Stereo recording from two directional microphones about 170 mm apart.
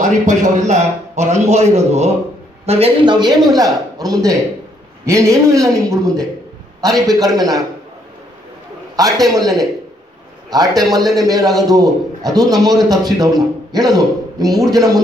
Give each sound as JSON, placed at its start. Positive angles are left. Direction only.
{"t": 0.3, "sound": "a man's voice", "side_deg": -45}
{"t": 8.9, "sound": "a man's voice", "side_deg": -20}